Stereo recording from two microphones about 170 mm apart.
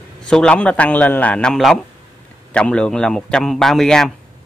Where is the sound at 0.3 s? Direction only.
5° left (ahead or behind).